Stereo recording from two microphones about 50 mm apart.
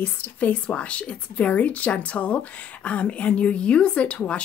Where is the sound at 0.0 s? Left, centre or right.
Left.